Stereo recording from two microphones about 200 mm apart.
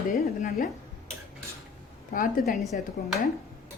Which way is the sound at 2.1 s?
45° left (ahead or behind).